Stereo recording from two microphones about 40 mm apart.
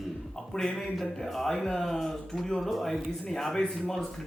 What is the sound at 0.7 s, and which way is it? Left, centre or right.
Speech, centre.